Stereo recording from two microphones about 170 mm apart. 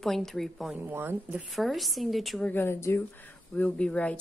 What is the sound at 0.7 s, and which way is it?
A woman's voice, 10° right (ahead or behind).